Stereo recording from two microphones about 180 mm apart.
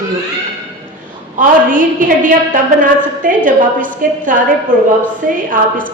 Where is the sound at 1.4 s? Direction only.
45° right (ahead or behind).